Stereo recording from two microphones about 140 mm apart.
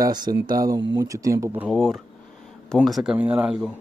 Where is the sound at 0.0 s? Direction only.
30° right (ahead or behind).